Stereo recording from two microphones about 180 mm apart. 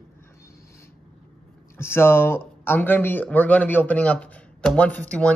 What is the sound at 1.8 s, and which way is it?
Speech, 15° left (ahead or behind).